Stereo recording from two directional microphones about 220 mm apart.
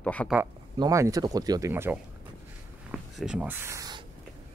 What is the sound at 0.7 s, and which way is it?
Speech, 15° right (ahead or behind).